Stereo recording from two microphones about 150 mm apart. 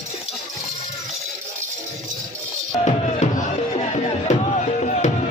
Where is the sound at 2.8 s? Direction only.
45° left (ahead or behind).